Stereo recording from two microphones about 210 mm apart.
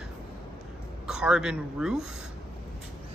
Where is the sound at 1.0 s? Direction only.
5° right (ahead or behind).